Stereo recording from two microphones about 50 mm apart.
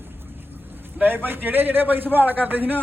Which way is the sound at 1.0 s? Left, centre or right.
Right.